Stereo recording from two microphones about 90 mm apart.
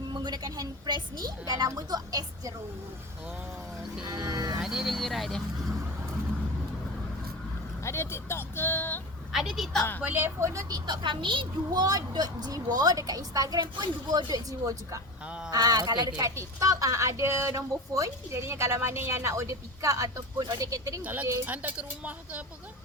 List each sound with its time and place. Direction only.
0.1 s a woman's voice: 55° right (ahead or behind)
4.1 s a woman's voice: 45° right (ahead or behind)
4.6 s speech: 5° right (ahead or behind)
7.9 s speech: 30° left (ahead or behind)
9.3 s speech: 5° right (ahead or behind)
10.0 s speech: 20° right (ahead or behind); by 10.8 s 35° right (ahead or behind)
10.8 s a woman's voice: 60° right (ahead or behind)
11.7 s a woman's voice: 45° right (ahead or behind)
16.3 s speech: 35° right (ahead or behind)
21.0 s speech: 20° right (ahead or behind)